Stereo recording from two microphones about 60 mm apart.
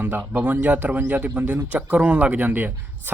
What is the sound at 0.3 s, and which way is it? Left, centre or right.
Speech, right.